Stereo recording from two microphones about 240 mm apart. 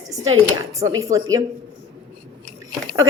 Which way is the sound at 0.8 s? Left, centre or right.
Centre.